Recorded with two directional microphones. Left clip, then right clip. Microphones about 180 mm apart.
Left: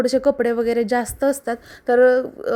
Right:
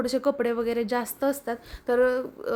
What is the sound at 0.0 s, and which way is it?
A woman's voice, 20° left (ahead or behind).